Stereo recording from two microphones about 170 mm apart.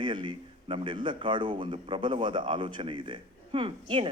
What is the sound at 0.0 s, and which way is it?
A man's voice, 25° right (ahead or behind).